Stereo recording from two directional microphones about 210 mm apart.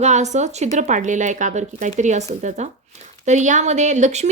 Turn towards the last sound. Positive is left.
turn(degrees=-35)  # may be behind; listen again after turning